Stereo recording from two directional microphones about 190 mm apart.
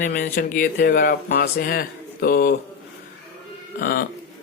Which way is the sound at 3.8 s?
55° left (ahead or behind).